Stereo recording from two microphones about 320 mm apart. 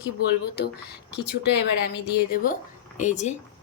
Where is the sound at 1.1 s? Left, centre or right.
Left.